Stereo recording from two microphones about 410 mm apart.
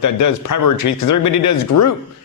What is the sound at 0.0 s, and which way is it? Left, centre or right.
A man's voice, left.